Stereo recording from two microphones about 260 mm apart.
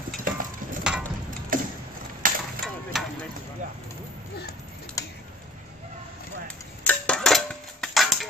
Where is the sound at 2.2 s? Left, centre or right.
Right.